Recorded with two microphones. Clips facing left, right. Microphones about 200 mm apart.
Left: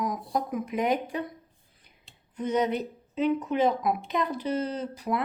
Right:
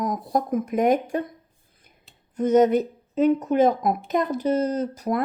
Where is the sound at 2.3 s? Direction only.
45° right (ahead or behind).